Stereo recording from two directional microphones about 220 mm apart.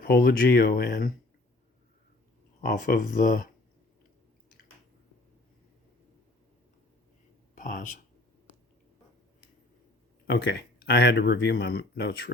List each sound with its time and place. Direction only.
0.0 s speech: 45° left (ahead or behind)
2.6 s speech: 40° left (ahead or behind)
7.5 s speech: 35° left (ahead or behind)
10.2 s speech: 50° left (ahead or behind)